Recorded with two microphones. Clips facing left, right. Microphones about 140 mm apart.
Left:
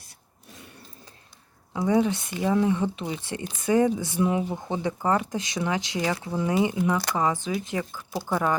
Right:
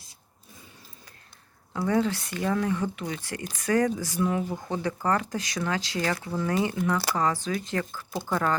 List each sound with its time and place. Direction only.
1.7 s speech: 15° left (ahead or behind)